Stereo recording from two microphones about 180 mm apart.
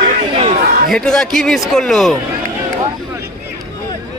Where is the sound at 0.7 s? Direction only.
55° right (ahead or behind).